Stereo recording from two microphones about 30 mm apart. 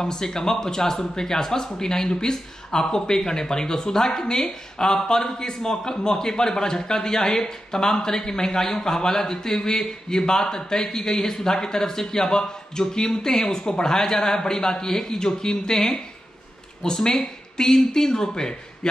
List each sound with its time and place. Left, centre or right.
0.0 s a man's voice: left
12.7 s speech: left